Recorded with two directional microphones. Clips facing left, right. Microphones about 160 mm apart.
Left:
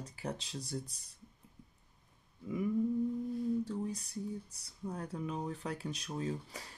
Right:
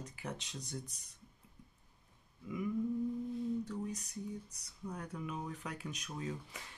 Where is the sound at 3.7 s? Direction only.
30° left (ahead or behind).